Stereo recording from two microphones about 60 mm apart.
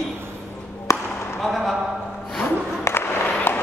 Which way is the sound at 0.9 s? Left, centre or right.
Left.